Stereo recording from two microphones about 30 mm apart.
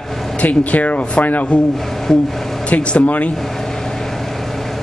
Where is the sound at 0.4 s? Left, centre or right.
Left.